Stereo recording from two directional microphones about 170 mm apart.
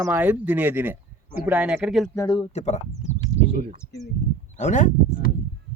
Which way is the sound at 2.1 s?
25° left (ahead or behind).